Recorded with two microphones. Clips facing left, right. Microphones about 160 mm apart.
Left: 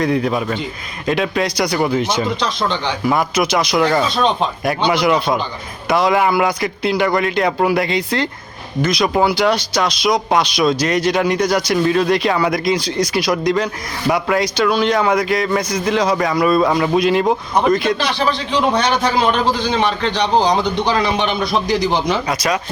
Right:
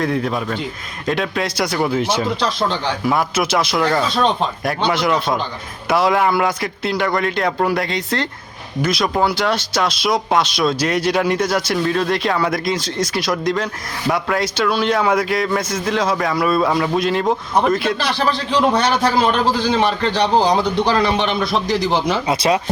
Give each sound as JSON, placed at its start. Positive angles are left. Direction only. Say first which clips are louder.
{"t": 0.0, "sound": "a man's voice", "louder": "left 3 dB", "side_deg": 0}
{"t": 22.3, "sound": "speech", "louder": "right 2 dB", "side_deg": -30}